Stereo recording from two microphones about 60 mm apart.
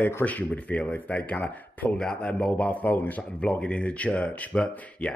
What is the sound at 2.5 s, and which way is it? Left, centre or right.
Speech, left.